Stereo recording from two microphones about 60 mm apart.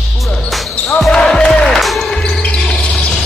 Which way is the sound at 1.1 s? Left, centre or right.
Centre.